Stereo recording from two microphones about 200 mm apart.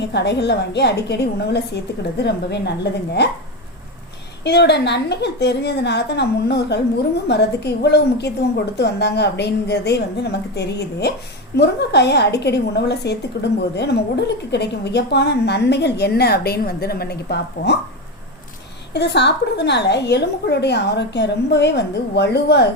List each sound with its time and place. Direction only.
0.1 s a woman's voice: 55° left (ahead or behind)
4.4 s a woman's voice: 55° left (ahead or behind)
18.9 s a woman's voice: 60° left (ahead or behind)